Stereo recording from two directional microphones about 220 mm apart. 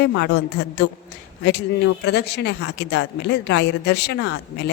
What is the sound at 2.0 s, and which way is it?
A woman's voice, 50° left (ahead or behind).